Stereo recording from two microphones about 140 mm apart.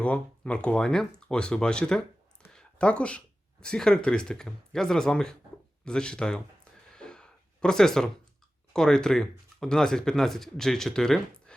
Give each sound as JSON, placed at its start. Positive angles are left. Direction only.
{"t": 0.0, "sound": "speech", "side_deg": 10}
{"t": 6.9, "sound": "gasp", "side_deg": 5}
{"t": 8.7, "sound": "speech", "side_deg": 5}